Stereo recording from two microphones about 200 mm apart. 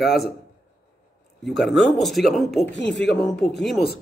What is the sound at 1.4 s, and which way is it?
Speech, centre (ahead or behind).